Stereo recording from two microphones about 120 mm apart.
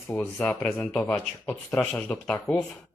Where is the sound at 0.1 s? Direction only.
20° left (ahead or behind).